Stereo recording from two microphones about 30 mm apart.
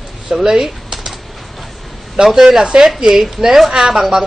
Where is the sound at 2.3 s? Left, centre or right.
Right.